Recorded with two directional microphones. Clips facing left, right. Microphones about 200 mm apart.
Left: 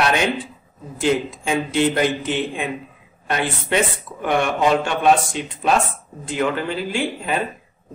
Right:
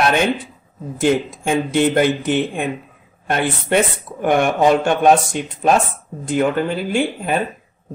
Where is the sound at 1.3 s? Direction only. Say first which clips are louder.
Right 3 dB; 50° right (ahead or behind).